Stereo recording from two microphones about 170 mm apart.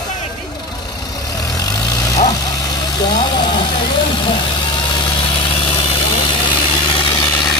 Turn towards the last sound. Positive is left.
turn(degrees=30)  # may be behind; listen again after turning